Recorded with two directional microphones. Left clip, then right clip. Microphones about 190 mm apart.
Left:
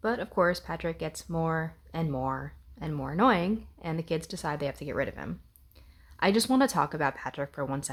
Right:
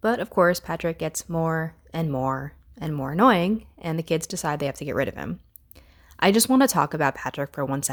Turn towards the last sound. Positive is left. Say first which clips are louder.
# right 6 dB
turn(degrees=-30)  # may be behind; listen again after turning